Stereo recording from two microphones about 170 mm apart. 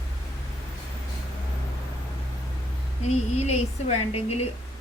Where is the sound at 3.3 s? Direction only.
40° left (ahead or behind).